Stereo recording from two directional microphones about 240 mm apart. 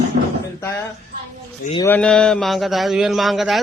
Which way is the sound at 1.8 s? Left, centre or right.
Centre.